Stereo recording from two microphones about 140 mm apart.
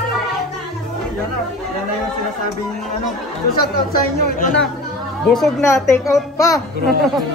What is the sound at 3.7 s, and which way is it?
Speech, 90° left.